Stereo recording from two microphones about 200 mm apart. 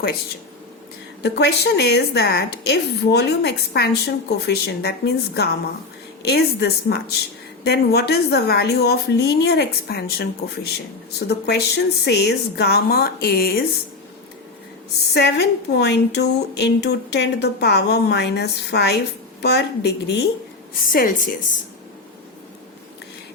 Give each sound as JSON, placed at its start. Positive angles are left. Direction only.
{"t": 1.2, "sound": "a woman's voice", "side_deg": 55}
{"t": 15.1, "sound": "a woman's voice", "side_deg": 55}
{"t": 20.9, "sound": "a woman's voice", "side_deg": 45}